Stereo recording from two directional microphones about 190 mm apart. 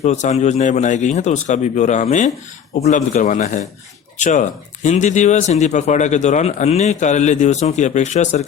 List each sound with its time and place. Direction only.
0.0 s speech: 40° left (ahead or behind)